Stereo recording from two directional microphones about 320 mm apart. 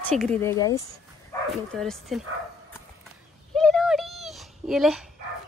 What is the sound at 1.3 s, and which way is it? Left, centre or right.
Bow-wow, centre.